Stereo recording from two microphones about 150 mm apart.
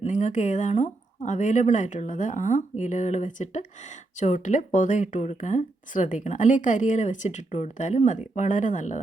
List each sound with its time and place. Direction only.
0.0 s speech: 55° left (ahead or behind)